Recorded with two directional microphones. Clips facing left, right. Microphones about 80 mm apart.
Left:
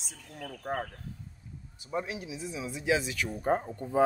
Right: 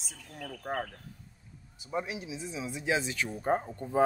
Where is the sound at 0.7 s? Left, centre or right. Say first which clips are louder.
Left 1 dB; centre.